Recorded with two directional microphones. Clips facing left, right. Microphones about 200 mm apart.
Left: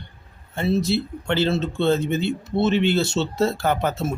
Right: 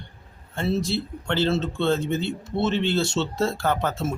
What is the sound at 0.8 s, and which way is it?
Speech, 10° left (ahead or behind).